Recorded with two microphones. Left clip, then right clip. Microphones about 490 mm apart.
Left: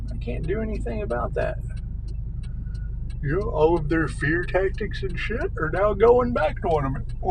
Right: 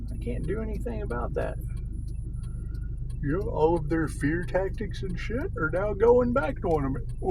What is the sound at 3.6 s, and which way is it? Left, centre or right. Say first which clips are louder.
Speech: left 3 dB; right.